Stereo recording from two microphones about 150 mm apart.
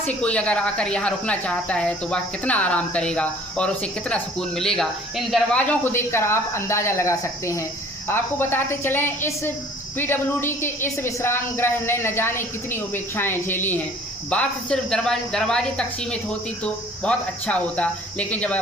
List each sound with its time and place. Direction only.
0.0 s speech: 10° left (ahead or behind)
5.5 s speech: 10° left (ahead or behind)